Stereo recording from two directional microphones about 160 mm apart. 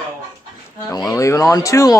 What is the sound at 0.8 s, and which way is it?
Speech, 20° left (ahead or behind).